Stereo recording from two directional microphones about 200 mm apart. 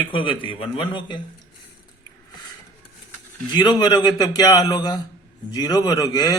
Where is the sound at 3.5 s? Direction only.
20° left (ahead or behind).